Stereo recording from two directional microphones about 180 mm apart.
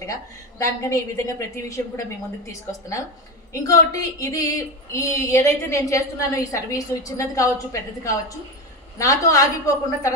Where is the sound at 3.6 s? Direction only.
20° left (ahead or behind).